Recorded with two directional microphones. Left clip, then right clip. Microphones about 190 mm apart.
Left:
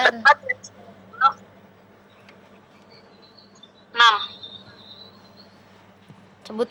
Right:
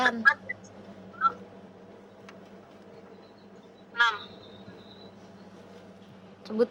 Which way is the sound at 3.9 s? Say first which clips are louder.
Left 10 dB; 50° left (ahead or behind).